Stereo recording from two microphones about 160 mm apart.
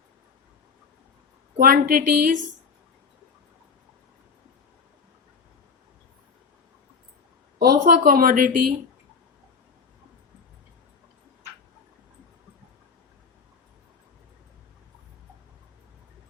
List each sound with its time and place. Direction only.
1.5 s a woman's voice: 65° right (ahead or behind)
7.6 s a woman's voice: 65° right (ahead or behind)